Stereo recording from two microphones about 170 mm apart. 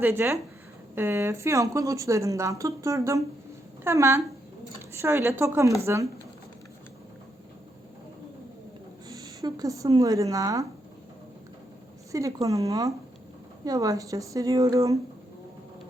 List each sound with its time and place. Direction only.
0.0 s a woman's voice: 15° right (ahead or behind)
9.0 s speech: 20° right (ahead or behind)
12.1 s speech: 20° right (ahead or behind)